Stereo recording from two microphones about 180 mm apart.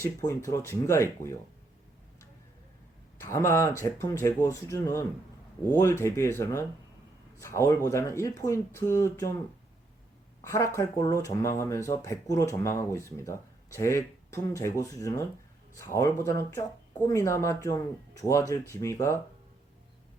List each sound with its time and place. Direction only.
0.3 s speech: 15° left (ahead or behind)
3.2 s speech: 15° left (ahead or behind)
10.4 s speech: 15° left (ahead or behind)